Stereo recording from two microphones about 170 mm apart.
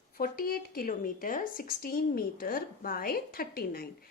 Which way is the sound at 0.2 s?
60° left (ahead or behind).